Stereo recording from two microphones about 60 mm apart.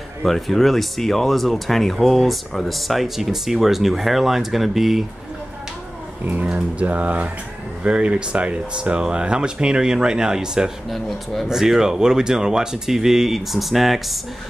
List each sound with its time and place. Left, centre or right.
0.2 s speech: centre
6.2 s speech: right; by 14.1 s centre